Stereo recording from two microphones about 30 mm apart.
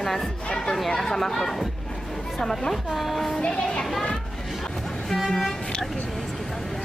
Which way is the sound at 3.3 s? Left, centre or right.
Left.